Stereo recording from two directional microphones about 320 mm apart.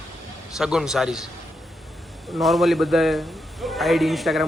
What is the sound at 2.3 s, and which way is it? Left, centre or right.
A man's voice, centre.